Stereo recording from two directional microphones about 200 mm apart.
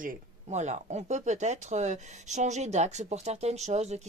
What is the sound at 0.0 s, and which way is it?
A woman's voice, 40° right (ahead or behind).